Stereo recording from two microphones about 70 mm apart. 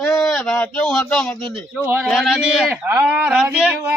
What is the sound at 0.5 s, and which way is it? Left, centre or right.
Speech, centre.